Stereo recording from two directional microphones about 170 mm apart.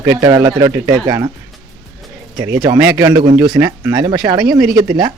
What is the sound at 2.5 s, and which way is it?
Speech, 20° right (ahead or behind).